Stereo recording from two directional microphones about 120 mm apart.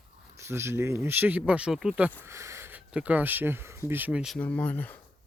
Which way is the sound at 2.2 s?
25° right (ahead or behind).